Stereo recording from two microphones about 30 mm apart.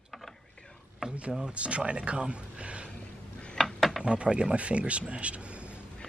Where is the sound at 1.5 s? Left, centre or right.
Right.